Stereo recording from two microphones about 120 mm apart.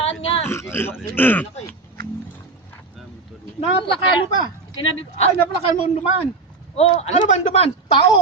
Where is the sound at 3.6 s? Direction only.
45° left (ahead or behind).